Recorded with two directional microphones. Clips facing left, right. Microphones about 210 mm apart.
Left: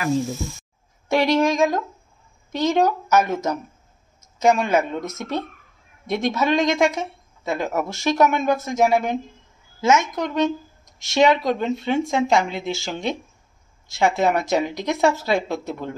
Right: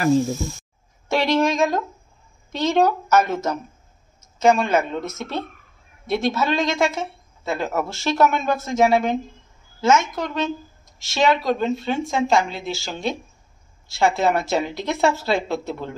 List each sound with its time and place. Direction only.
1.0 s speech: 15° left (ahead or behind)